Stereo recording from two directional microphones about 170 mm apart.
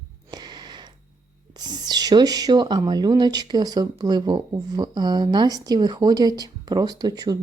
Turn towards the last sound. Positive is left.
turn(degrees=-20)  # may be behind; listen again after turning